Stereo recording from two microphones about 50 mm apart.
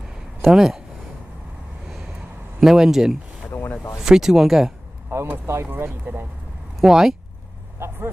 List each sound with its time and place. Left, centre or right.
0.5 s speech: centre
2.6 s speech: centre
5.1 s vehicle: right
5.5 s speech: right
6.8 s speech: centre
7.8 s vehicle: right